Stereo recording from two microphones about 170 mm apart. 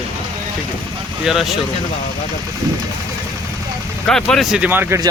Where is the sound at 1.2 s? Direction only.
Centre (ahead or behind).